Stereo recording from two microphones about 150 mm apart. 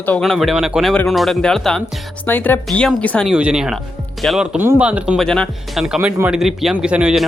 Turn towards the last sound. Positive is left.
turn(degrees=-5)  # may be behind; listen again after turning